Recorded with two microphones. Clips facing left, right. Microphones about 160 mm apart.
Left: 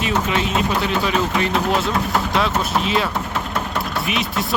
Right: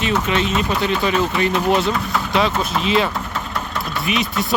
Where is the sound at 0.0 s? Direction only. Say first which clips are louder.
Right 1 dB; 5° left (ahead or behind).